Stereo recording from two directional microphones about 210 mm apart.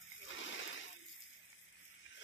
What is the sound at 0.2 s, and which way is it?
Splash, 60° left (ahead or behind).